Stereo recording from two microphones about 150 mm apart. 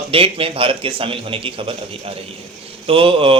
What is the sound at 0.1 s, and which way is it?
Speech, 40° right (ahead or behind).